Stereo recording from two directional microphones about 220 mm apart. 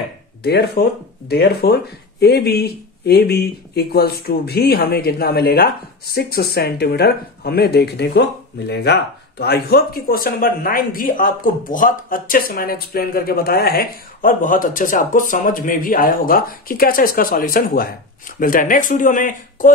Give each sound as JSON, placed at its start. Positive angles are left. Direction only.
{"t": 0.4, "sound": "speech", "side_deg": 45}